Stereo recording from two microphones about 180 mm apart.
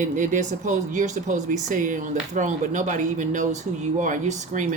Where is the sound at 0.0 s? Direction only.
45° right (ahead or behind).